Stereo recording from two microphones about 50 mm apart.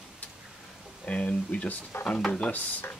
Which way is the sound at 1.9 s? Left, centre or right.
Left.